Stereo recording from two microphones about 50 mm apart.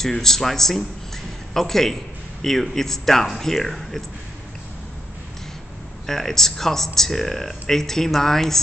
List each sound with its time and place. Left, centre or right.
0.0 s speech: centre
6.0 s speech: centre